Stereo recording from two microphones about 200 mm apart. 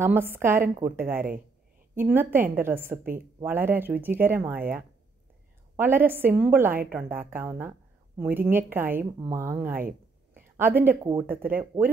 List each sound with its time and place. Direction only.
0.0 s speech: 10° right (ahead or behind)